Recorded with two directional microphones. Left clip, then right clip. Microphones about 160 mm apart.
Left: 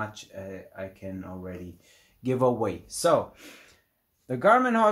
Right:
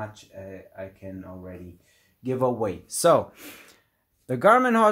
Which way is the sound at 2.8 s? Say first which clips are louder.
Right 4 dB; 90° right.